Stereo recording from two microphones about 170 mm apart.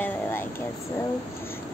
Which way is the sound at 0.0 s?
10° left (ahead or behind).